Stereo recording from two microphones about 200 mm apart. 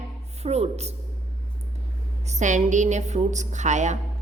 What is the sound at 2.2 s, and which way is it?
A woman's voice, 35° right (ahead or behind).